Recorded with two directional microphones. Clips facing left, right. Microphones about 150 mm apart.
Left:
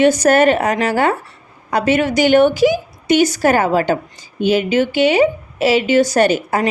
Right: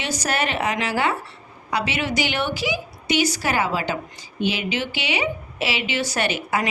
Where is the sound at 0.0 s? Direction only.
50° left (ahead or behind).